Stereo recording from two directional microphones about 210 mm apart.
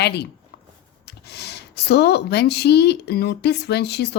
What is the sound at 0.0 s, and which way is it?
A woman's voice, 50° left (ahead or behind).